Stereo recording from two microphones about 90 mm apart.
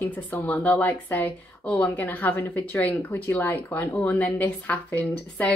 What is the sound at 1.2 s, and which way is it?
A woman's voice, 15° left (ahead or behind).